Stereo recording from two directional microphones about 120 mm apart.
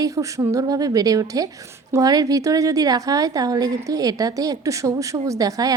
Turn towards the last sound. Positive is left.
turn(degrees=-30)  # may be behind; listen again after turning